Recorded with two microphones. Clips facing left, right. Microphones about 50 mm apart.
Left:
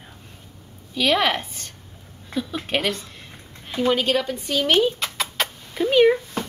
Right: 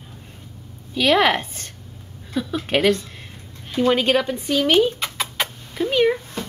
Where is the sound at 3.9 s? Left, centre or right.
Right.